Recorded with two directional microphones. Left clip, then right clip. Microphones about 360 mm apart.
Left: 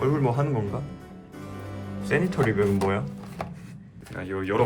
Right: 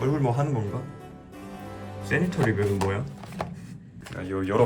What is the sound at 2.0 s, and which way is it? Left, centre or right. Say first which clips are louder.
Speech: left 1 dB; centre.